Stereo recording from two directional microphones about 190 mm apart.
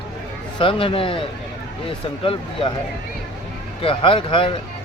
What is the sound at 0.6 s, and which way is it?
Speech, 30° left (ahead or behind).